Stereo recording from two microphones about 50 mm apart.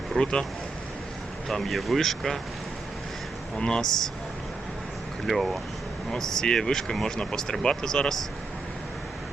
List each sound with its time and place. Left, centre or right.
0.2 s speech: centre
1.5 s speech: centre
3.6 s speech: centre
5.2 s speech: centre